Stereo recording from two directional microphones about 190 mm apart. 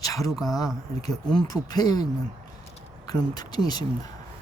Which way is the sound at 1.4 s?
20° left (ahead or behind).